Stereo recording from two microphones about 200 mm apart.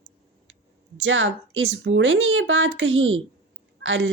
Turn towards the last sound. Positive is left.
turn(degrees=-70)  # may be behind; listen again after turning